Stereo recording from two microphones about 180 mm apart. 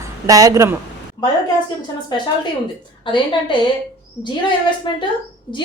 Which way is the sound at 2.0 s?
25° left (ahead or behind).